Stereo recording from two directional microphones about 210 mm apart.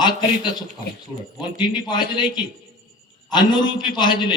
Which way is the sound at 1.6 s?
20° left (ahead or behind).